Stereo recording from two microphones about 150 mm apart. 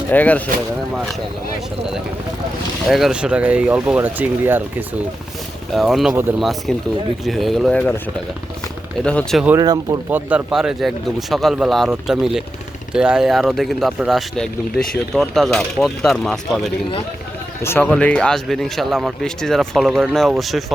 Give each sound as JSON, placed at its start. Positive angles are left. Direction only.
{"t": 0.1, "sound": "speech", "side_deg": 10}
{"t": 2.8, "sound": "speech", "side_deg": 0}
{"t": 5.7, "sound": "speech", "side_deg": 0}
{"t": 9.0, "sound": "speech", "side_deg": 5}
{"t": 9.6, "sound": "speech", "side_deg": -25}
{"t": 10.1, "sound": "speech", "side_deg": -10}
{"t": 17.6, "sound": "speech", "side_deg": 15}